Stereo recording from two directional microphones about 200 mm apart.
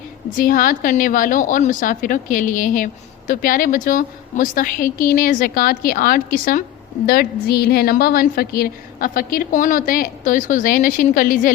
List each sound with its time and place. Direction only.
0.3 s a woman's voice: 45° left (ahead or behind)